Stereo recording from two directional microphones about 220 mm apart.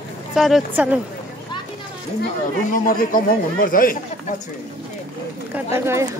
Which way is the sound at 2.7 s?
40° left (ahead or behind).